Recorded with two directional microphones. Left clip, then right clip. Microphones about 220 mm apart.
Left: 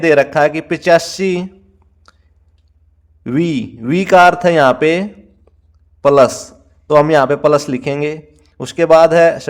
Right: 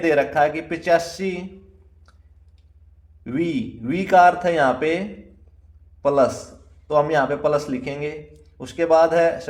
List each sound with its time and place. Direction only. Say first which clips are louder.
0.0 s a man's voice: left 7 dB; 40° left (ahead or behind)
2.0 s a sound: left 12 dB; 40° left (ahead or behind)
3.2 s a man's voice: left 7 dB; 40° left (ahead or behind)